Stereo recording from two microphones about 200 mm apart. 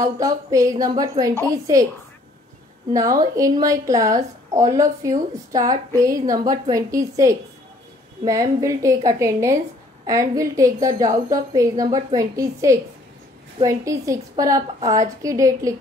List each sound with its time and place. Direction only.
0.0 s a woman's voice: 15° right (ahead or behind)
2.9 s a woman's voice: 15° right (ahead or behind)